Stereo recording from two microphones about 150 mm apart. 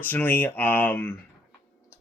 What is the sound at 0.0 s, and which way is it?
Speech, 15° left (ahead or behind).